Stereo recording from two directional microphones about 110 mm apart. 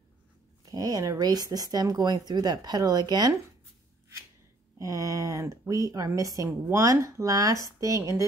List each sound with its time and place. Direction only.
0.7 s a woman's voice: 35° right (ahead or behind)
4.7 s a woman's voice: 30° right (ahead or behind)